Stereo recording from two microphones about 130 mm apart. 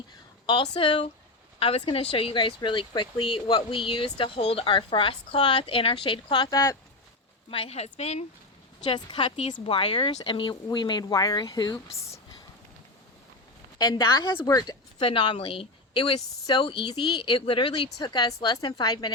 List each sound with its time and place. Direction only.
0.7 s speech: 45° left (ahead or behind)
7.5 s speech: 50° left (ahead or behind)
8.8 s a woman's voice: 35° left (ahead or behind)
14.4 s speech: 30° left (ahead or behind)
15.0 s a woman's voice: 40° left (ahead or behind)